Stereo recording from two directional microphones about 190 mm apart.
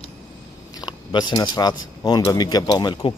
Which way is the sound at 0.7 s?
20° left (ahead or behind).